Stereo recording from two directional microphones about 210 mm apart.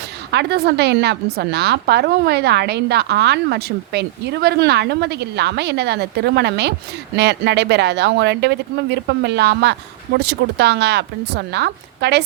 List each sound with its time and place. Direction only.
0.3 s a woman's voice: 50° right (ahead or behind)